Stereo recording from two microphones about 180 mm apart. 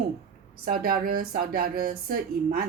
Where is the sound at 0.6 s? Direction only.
55° right (ahead or behind).